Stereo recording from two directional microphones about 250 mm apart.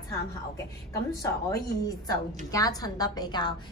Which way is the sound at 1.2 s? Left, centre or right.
Centre.